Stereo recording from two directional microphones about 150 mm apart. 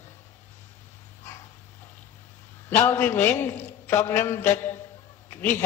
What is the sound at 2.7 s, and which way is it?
A man's voice, 15° left (ahead or behind).